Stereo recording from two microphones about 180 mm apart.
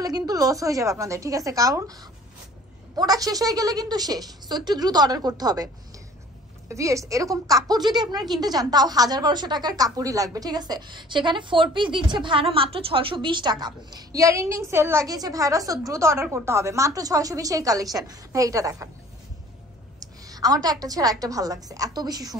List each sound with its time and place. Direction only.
0.0 s a woman's voice: 20° right (ahead or behind)
6.7 s a woman's voice: 15° right (ahead or behind)
20.0 s a sound: 20° right (ahead or behind)
20.8 s a woman's voice: 20° right (ahead or behind)